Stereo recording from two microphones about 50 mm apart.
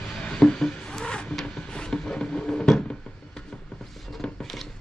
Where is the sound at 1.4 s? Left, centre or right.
Centre.